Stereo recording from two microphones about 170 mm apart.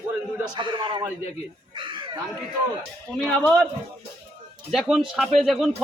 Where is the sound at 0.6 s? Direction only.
25° right (ahead or behind).